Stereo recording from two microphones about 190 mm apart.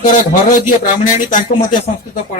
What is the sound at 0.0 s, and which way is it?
Speech, 45° left (ahead or behind).